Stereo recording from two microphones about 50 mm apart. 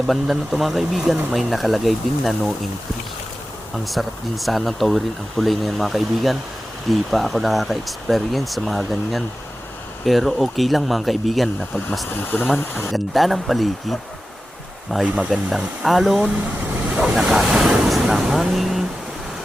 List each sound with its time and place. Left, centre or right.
0.1 s speech: centre
3.8 s speech: centre
12.3 s speech: left
12.9 s speech: centre
14.9 s speech: centre
16.2 s vehicle: right
17.2 s speech: centre